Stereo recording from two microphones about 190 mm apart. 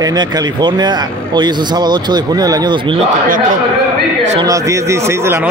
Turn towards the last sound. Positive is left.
turn(degrees=-15)  # may be behind; listen again after turning